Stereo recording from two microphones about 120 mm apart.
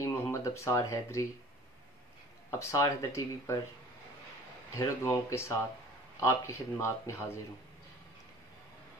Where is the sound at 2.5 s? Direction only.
25° left (ahead or behind).